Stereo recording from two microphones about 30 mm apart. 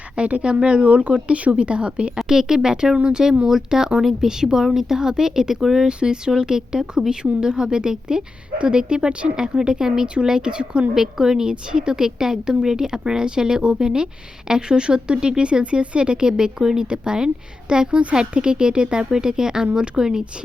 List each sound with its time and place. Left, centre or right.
0.2 s speech: right
1.5 s a woman's voice: right
2.1 s speech: centre
5.9 s a woman's voice: right
10.9 s a woman's voice: centre